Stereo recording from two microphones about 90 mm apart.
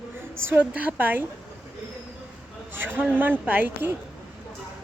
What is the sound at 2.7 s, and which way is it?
A woman's voice, 20° right (ahead or behind).